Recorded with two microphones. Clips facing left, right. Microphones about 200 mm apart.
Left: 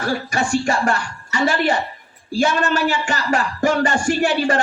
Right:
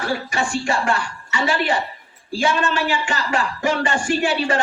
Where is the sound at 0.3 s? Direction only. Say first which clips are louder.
Left 3 dB; 40° left (ahead or behind).